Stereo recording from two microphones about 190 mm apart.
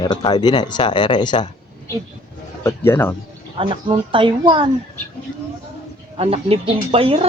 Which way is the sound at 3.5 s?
25° right (ahead or behind).